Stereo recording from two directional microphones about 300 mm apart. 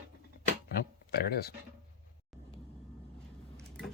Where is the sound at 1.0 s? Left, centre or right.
Left.